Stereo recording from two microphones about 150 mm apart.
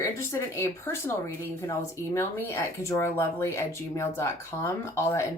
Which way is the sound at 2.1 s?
15° left (ahead or behind).